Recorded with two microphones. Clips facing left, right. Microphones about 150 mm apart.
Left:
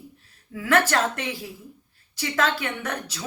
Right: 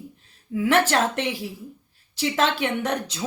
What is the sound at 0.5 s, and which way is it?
Speech, 20° right (ahead or behind).